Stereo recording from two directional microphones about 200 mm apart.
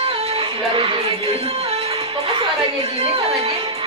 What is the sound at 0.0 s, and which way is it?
Music, 30° right (ahead or behind).